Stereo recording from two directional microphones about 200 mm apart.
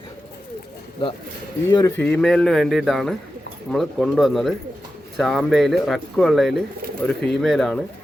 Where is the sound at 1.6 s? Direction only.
15° left (ahead or behind).